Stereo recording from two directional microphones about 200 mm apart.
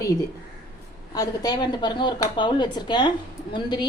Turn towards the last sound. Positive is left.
turn(degrees=20)  # may be behind; listen again after turning